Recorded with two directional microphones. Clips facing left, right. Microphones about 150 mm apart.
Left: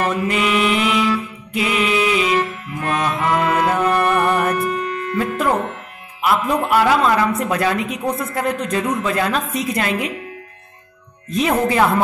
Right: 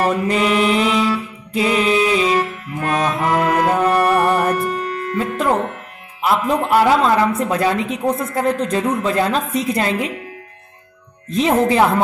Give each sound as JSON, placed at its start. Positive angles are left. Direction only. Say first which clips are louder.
{"t": 0.0, "sound": "mantra", "louder": "right 2 dB", "side_deg": -35}
{"t": 3.7, "sound": "music", "louder": "right 2 dB", "side_deg": -35}
{"t": 5.1, "sound": "music", "louder": "right 1 dB", "side_deg": -25}
{"t": 6.2, "sound": "a woman's voice", "louder": "right 1 dB", "side_deg": -25}
{"t": 11.2, "sound": "a woman's voice", "louder": "right 2 dB", "side_deg": -25}